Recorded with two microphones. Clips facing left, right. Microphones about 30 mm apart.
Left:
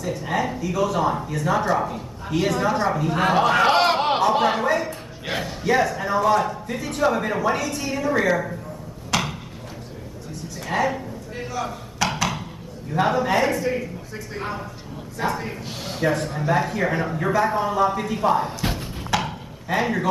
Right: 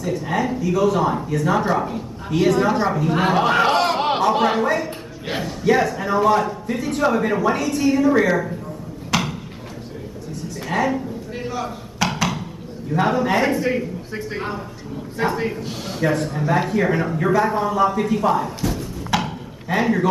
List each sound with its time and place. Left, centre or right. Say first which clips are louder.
0.0 s a man's voice: right 2 dB; centre
3.7 s speech: even; centre
4.0 s a man's voice: right 1 dB; centre
9.1 s a sound: right 2 dB; centre
10.7 s a sound: right 2 dB; centre
11.6 s chop: even; centre
12.9 s speech: right 1 dB; centre
15.2 s a man's voice: right 3 dB; centre
15.6 s speech: right 2 dB; centre
18.6 s thump: right 2 dB; left
19.1 s a sound: right 2 dB; centre
19.7 s speech: right 3 dB; centre